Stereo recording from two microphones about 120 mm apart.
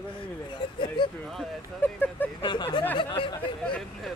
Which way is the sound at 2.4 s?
40° left (ahead or behind).